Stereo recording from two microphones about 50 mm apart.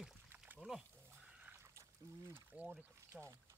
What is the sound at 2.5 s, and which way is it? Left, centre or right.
Speech, right.